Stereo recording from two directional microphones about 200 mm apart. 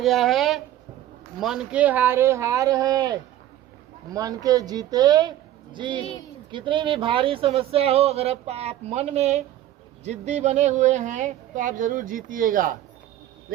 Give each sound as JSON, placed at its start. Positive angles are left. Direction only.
{"t": 0.0, "sound": "speech", "side_deg": 0}
{"t": 6.0, "sound": "speech", "side_deg": 30}
{"t": 6.5, "sound": "speech", "side_deg": -25}